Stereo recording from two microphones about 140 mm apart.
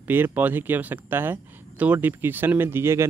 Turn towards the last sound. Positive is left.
turn(degrees=-20)  # may be behind; listen again after turning